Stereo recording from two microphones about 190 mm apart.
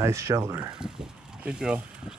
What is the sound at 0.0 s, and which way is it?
Speech, 15° right (ahead or behind).